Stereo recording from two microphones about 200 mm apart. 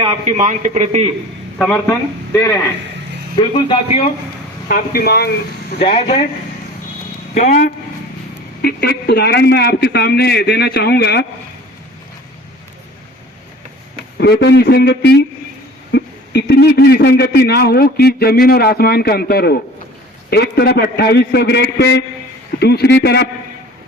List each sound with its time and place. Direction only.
0.0 s a man's voice: 30° right (ahead or behind)
1.9 s speech: 15° left (ahead or behind)
3.3 s a man's voice: 25° left (ahead or behind)
4.7 s a man's voice: 50° left (ahead or behind)
5.8 s a man's voice: 25° left (ahead or behind)
7.3 s speech: 40° left (ahead or behind)
8.6 s a man's voice: 55° left (ahead or behind)
14.2 s a man's voice: 55° left (ahead or behind)